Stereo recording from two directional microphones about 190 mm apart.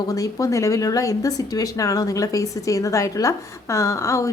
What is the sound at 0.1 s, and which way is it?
Speech, 15° left (ahead or behind).